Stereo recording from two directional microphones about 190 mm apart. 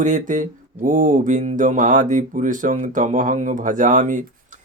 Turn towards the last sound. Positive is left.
turn(degrees=-40)  # may be behind; listen again after turning